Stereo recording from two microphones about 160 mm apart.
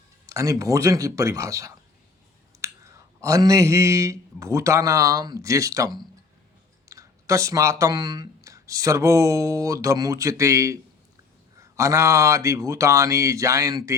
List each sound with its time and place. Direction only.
0.3 s a man's voice: 20° right (ahead or behind)
2.5 s a sound: 20° right (ahead or behind)
3.2 s a man's voice: 20° right (ahead or behind)